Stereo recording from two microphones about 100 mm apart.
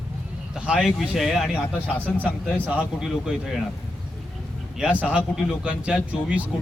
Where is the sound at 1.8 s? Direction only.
15° right (ahead or behind).